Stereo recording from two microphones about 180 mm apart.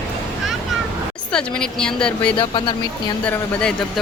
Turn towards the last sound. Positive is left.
turn(degrees=5)  # may be behind; listen again after turning